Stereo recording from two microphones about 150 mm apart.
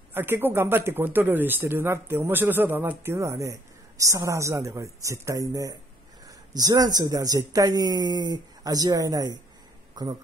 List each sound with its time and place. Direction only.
0.1 s speech: 15° right (ahead or behind)